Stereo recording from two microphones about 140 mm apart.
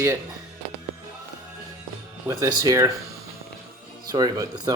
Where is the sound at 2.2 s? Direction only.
25° right (ahead or behind).